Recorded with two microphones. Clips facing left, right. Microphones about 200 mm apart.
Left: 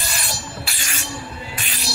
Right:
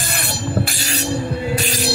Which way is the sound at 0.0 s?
60° right (ahead or behind).